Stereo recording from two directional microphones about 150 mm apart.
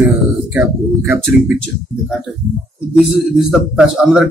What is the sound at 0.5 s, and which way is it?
Speech, 15° right (ahead or behind).